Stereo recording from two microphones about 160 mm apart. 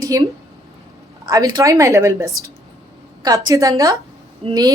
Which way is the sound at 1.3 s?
25° right (ahead or behind).